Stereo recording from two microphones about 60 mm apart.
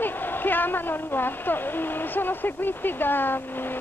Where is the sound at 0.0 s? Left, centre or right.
Left.